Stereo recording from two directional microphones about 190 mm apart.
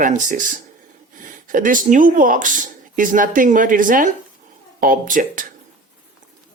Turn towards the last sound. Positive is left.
turn(degrees=-45)  # may be behind; listen again after turning